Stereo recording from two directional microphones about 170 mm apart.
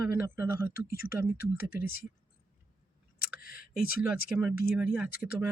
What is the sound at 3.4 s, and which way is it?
Speech, 60° left (ahead or behind).